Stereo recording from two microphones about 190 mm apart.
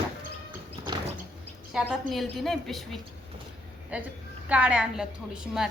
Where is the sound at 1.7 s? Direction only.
Centre (ahead or behind).